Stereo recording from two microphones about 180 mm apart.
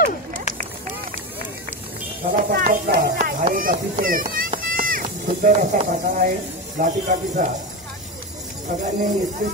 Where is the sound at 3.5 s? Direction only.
50° right (ahead or behind).